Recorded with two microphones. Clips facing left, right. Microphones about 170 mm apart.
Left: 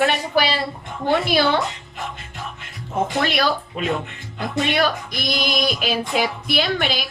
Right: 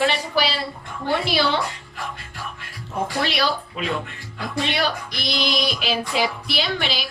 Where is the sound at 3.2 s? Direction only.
50° left (ahead or behind).